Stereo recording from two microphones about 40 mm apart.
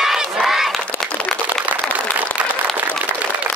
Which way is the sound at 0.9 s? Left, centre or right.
Left.